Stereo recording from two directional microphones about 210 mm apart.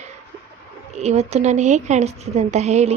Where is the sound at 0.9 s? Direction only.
30° right (ahead or behind).